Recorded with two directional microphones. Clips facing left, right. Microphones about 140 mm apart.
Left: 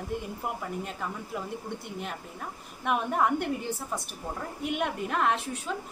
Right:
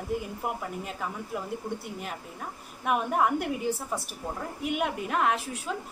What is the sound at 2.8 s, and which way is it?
A woman's voice, 5° right (ahead or behind).